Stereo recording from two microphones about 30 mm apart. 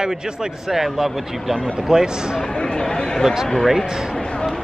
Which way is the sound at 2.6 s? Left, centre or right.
Left.